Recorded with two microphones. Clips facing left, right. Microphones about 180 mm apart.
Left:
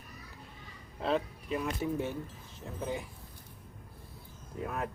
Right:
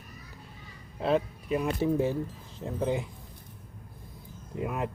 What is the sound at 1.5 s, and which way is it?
Speech, 30° right (ahead or behind).